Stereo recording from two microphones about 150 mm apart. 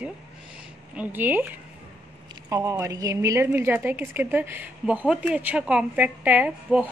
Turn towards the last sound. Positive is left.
turn(degrees=-10)  # may be behind; listen again after turning